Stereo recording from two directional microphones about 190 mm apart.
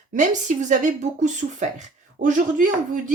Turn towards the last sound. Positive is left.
turn(degrees=-40)  # may be behind; listen again after turning